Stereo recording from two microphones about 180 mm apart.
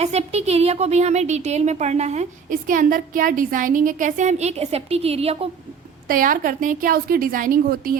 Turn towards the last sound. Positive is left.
turn(degrees=-50)  # may be behind; listen again after turning